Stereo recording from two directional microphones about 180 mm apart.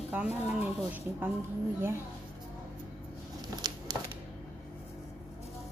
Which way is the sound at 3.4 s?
20° right (ahead or behind).